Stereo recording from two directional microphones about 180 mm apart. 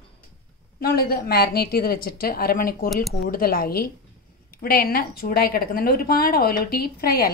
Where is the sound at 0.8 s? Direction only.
55° left (ahead or behind).